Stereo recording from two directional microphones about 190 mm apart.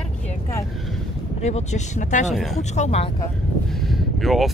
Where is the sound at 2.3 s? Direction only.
Centre (ahead or behind).